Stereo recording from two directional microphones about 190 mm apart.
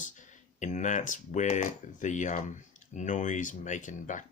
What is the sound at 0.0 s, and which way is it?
Speech, 40° left (ahead or behind).